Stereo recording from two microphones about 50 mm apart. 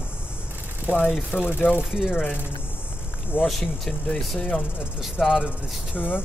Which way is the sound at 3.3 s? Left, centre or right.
Left.